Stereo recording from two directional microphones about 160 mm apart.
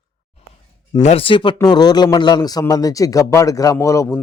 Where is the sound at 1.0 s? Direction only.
35° left (ahead or behind); by 4.2 s 20° left (ahead or behind).